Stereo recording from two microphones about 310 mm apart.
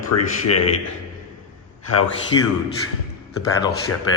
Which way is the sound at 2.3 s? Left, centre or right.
Centre.